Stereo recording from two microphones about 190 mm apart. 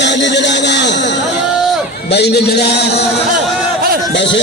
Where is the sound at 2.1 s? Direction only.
60° left (ahead or behind).